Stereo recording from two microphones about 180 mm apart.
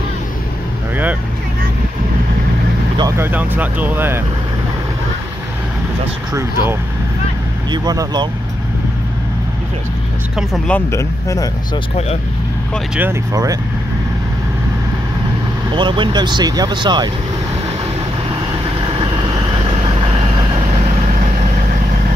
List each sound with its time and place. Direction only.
3.0 s speech: 15° right (ahead or behind)
6.3 s speech: 15° right (ahead or behind)
10.7 s speech: 15° left (ahead or behind)
13.0 s speech: 20° right (ahead or behind)
15.7 s speech: 25° right (ahead or behind)
18.9 s vehicle: 30° right (ahead or behind)